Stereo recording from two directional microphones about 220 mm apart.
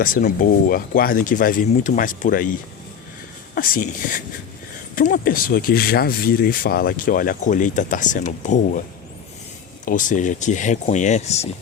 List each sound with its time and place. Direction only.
0.0 s speech: 35° left (ahead or behind)
9.8 s speech: 35° left (ahead or behind)